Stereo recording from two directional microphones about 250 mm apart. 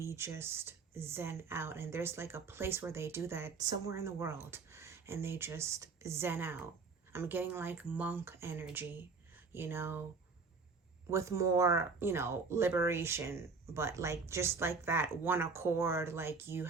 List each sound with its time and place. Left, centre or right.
0.0 s speech: centre
11.1 s speech: centre